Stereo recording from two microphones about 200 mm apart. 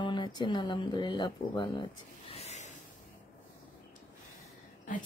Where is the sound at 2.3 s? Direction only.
35° left (ahead or behind).